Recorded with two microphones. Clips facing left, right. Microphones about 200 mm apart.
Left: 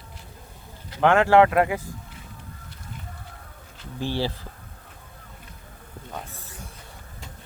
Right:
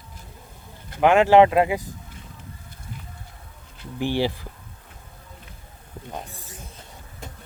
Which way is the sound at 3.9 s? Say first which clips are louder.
Right 4 dB; 15° right (ahead or behind).